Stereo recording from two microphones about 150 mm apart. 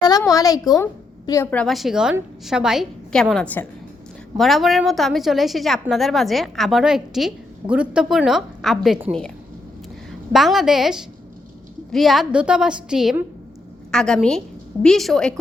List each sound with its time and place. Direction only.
0.0 s a woman's voice: 25° left (ahead or behind)
1.5 s a woman's voice: 5° left (ahead or behind)
4.4 s a woman's voice: centre (ahead or behind)
10.1 s a woman's voice: centre (ahead or behind)